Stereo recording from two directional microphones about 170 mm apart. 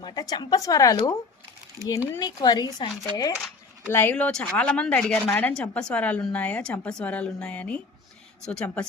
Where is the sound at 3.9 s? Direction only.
10° left (ahead or behind).